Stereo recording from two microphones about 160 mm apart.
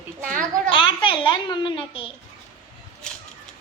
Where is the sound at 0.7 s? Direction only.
30° left (ahead or behind).